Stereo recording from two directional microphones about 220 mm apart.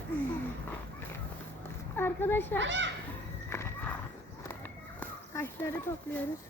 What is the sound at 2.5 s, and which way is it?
Speech, 55° right (ahead or behind).